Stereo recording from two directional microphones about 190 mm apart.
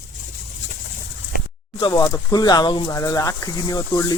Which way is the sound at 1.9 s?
15° left (ahead or behind).